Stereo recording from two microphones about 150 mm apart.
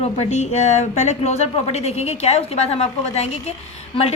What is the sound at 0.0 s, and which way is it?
A woman's voice, 45° left (ahead or behind).